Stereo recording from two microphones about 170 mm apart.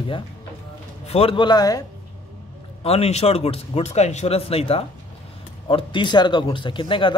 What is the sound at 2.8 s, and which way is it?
Speech, 40° left (ahead or behind).